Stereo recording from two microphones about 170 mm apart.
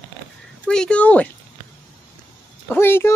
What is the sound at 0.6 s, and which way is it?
Speech, 5° left (ahead or behind).